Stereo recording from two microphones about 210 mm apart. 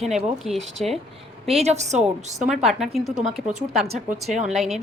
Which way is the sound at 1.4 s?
30° right (ahead or behind).